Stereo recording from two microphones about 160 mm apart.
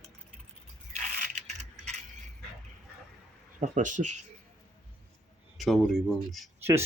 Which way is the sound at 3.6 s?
50° right (ahead or behind).